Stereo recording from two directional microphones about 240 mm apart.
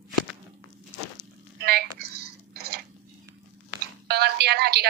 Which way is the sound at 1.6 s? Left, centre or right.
Right.